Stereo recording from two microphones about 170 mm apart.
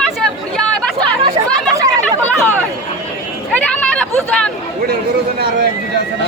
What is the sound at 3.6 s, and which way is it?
Chatter, 5° left (ahead or behind).